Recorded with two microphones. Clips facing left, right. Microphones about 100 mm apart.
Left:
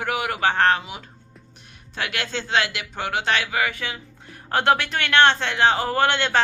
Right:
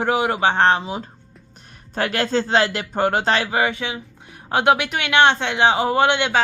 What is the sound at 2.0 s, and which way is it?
A man's voice, 40° right (ahead or behind).